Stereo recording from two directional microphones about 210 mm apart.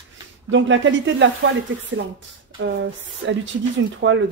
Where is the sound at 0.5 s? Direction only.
60° right (ahead or behind).